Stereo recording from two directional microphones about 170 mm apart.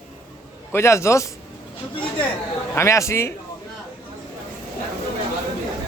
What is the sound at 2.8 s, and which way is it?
Speech, 15° left (ahead or behind).